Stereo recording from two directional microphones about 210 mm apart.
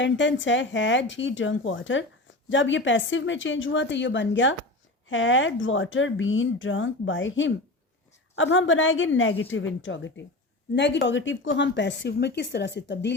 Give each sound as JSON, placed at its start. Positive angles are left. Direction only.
{"t": 0.0, "sound": "a woman's voice", "side_deg": 60}